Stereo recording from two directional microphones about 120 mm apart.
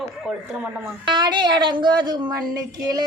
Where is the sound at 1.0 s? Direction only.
40° right (ahead or behind).